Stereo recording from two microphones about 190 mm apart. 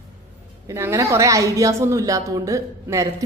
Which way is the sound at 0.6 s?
15° right (ahead or behind).